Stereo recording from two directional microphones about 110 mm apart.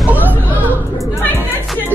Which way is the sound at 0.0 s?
15° right (ahead or behind).